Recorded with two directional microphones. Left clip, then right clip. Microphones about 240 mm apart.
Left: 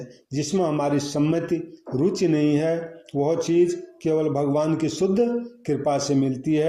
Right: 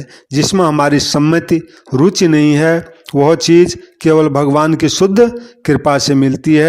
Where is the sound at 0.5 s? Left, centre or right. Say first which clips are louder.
Right 10 dB; right.